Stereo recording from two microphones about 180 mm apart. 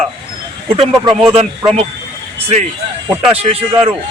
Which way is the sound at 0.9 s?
25° right (ahead or behind).